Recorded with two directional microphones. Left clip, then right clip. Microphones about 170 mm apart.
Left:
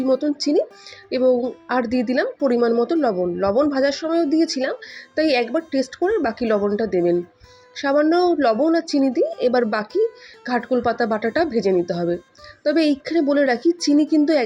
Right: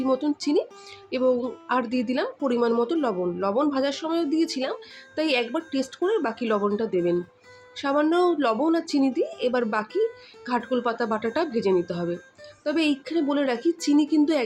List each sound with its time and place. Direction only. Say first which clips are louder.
0.1 s speech: left 5 dB; 15° left (ahead or behind)